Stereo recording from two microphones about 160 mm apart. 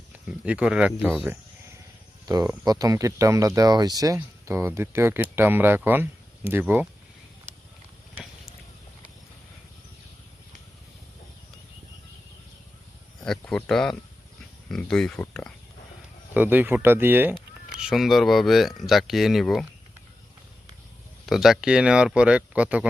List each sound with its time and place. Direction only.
0.1 s speech: 10° right (ahead or behind)
2.2 s speech: 25° right (ahead or behind)
13.2 s cricket: 5° left (ahead or behind)
14.7 s speech: 5° left (ahead or behind)
16.3 s speech: 10° right (ahead or behind)
21.2 s speech: centre (ahead or behind)